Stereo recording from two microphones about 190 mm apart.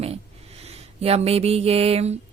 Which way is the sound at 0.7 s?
30° right (ahead or behind).